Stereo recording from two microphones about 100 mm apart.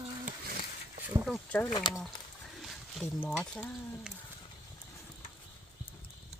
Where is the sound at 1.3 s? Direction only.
15° left (ahead or behind).